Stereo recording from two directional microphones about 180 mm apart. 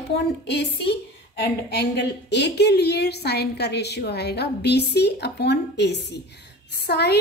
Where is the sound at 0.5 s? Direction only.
70° left (ahead or behind).